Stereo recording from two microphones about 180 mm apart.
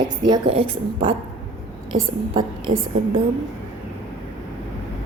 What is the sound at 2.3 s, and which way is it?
Speech, 30° right (ahead or behind).